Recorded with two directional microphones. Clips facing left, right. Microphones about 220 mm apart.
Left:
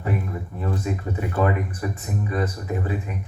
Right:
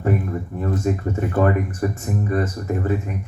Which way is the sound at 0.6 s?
45° right (ahead or behind).